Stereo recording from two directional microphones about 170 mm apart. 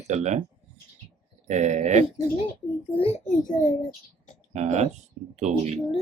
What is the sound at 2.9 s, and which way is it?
Speech, 35° left (ahead or behind).